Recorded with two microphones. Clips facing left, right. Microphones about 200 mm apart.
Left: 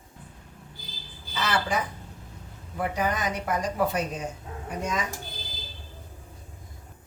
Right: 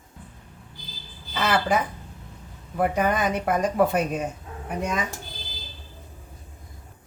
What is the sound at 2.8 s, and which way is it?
Speech, 55° right (ahead or behind).